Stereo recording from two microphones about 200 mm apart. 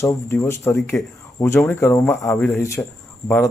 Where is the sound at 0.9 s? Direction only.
Centre (ahead or behind).